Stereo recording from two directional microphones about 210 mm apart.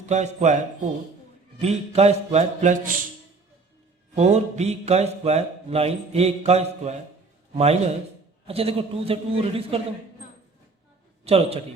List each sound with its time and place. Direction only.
0.0 s a man's voice: 35° right (ahead or behind)
4.1 s a man's voice: 30° right (ahead or behind)
11.3 s a man's voice: 30° right (ahead or behind)